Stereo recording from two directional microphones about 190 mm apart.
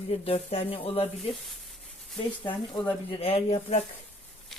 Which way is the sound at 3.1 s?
30° left (ahead or behind).